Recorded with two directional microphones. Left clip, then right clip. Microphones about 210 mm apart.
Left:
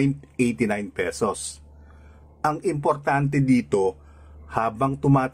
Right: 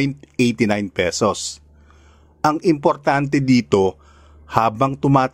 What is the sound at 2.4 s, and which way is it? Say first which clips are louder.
A man's voice: right 6 dB; 35° right (ahead or behind).